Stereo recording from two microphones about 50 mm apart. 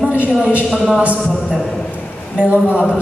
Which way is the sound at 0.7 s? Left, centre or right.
Centre.